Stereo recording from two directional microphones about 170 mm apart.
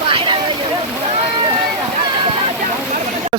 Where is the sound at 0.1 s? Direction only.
30° right (ahead or behind).